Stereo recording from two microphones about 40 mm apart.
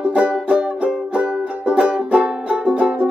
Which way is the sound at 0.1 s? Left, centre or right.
Right.